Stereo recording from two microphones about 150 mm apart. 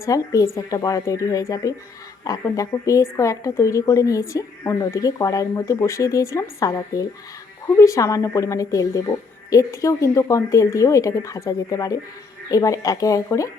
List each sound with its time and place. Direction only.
0.0 s a woman's voice: 20° left (ahead or behind)